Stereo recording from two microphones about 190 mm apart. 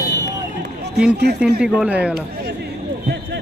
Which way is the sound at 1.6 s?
5° right (ahead or behind).